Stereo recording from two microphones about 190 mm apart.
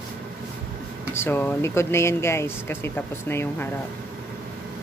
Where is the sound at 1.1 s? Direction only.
10° left (ahead or behind).